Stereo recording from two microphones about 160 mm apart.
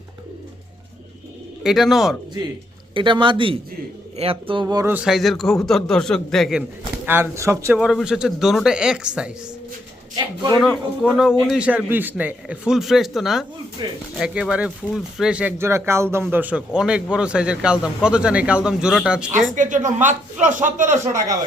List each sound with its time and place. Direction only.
1.6 s a man's voice: centre (ahead or behind)
2.9 s speech: 30° right (ahead or behind)
4.6 s speech: 20° right (ahead or behind)
4.9 s a man's voice: centre (ahead or behind); by 7.8 s 20° right (ahead or behind)
7.8 s a man's voice: 5° right (ahead or behind)
10.2 s speech: 25° right (ahead or behind)
11.4 s a man's voice: 5° right (ahead or behind)
13.8 s speech: 30° right (ahead or behind)
14.2 s a man's voice: 5° right (ahead or behind)
19.5 s a man's voice: 50° right (ahead or behind)